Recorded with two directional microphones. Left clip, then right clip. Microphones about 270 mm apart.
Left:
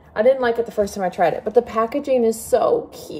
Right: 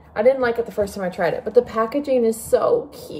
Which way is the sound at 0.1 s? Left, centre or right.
Centre.